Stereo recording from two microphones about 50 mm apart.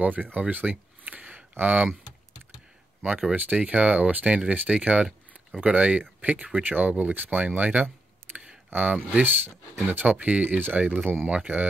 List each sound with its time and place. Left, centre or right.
0.0 s speech: right
3.3 s speech: right